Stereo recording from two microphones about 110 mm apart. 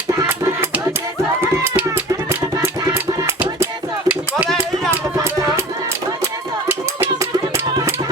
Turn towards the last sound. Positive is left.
turn(degrees=-20)  # may be behind; listen again after turning